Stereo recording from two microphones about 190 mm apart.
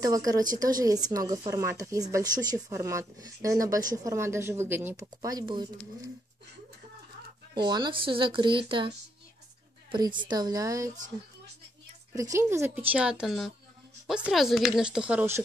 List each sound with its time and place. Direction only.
0.0 s speech: 20° right (ahead or behind)
7.5 s speech: 25° right (ahead or behind)
12.2 s speech: 15° right (ahead or behind)